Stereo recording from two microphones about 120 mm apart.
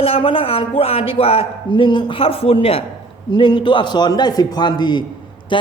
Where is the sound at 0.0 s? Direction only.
50° left (ahead or behind).